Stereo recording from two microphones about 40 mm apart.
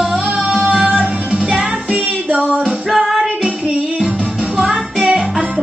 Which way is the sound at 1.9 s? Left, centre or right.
Right.